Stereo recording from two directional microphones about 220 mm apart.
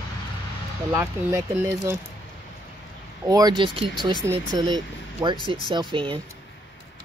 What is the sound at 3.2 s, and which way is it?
Speech, 15° right (ahead or behind).